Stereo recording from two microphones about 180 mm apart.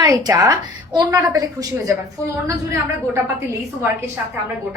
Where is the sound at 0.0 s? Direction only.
20° right (ahead or behind).